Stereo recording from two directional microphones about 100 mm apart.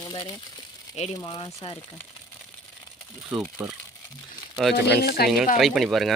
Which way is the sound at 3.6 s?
10° right (ahead or behind).